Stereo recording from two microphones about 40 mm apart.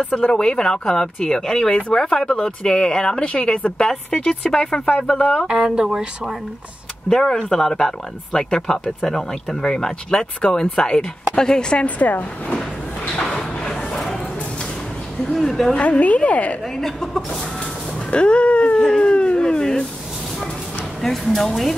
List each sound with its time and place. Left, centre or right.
0.0 s speech: left
3.0 s a woman's voice: left
5.2 s a woman's voice: left
5.5 s speech: centre
7.1 s a woman's voice: centre
11.8 s a woman's voice: left
12.5 s a sound: left
15.3 s speech: centre
15.7 s a woman's voice: left
16.7 s speech: centre
18.1 s a sound: left
18.9 s speech: centre
19.1 s a sound: left
21.0 s speech: centre